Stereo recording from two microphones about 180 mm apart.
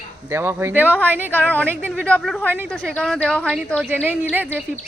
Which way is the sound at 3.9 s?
10° right (ahead or behind).